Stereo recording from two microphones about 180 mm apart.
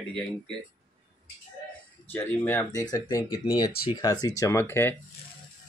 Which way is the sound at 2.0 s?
10° left (ahead or behind).